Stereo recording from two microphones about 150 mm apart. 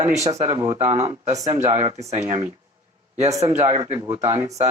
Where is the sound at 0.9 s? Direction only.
45° right (ahead or behind).